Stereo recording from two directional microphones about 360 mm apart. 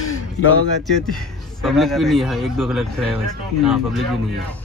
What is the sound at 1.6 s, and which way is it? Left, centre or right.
Speech, centre.